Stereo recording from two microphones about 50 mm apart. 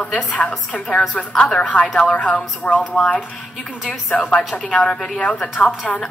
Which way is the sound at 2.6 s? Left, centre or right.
Left.